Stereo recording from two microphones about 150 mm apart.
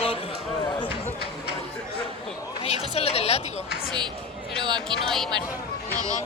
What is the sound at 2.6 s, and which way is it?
Speech, 45° left (ahead or behind).